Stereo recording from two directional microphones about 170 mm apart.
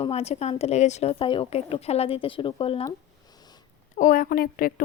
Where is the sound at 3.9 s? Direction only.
50° left (ahead or behind).